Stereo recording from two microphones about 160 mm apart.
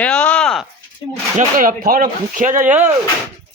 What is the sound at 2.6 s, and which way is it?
Speech, 10° right (ahead or behind).